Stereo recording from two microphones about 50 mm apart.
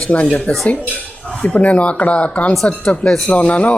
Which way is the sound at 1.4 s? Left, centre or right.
Left.